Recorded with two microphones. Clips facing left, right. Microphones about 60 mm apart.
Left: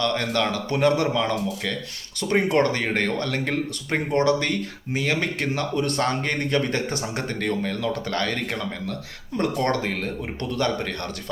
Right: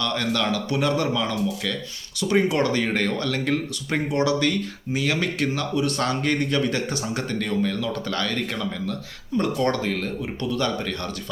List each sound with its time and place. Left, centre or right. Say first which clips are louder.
0.0 s speech: left 1 dB; left
2.2 s speech: even; left
9.4 s speech: even; left